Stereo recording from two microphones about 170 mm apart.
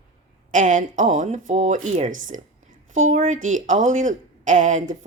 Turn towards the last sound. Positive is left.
turn(degrees=-45)  # may be behind; listen again after turning